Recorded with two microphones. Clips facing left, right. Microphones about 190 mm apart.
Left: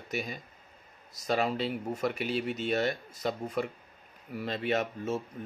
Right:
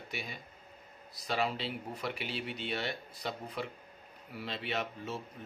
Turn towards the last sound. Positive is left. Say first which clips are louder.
# left 7 dB
turn(degrees=45)  # may be behind; listen again after turning